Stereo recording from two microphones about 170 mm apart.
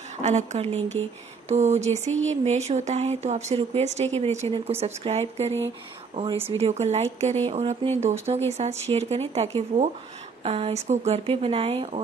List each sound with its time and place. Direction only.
0.2 s speech: 45° right (ahead or behind)